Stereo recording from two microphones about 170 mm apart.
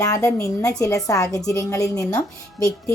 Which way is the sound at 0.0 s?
20° left (ahead or behind).